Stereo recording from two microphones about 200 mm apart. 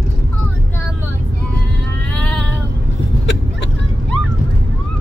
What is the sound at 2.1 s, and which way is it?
Child singing, 5° left (ahead or behind).